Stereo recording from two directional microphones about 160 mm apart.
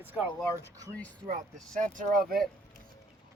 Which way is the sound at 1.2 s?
50° right (ahead or behind).